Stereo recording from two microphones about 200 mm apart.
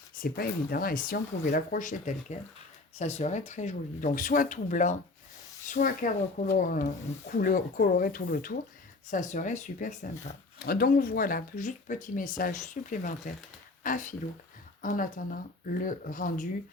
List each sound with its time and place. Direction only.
0.2 s speech: 45° left (ahead or behind)
10.7 s speech: 50° left (ahead or behind)